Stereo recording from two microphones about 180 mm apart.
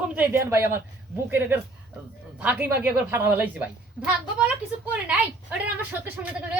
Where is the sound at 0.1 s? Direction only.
10° right (ahead or behind).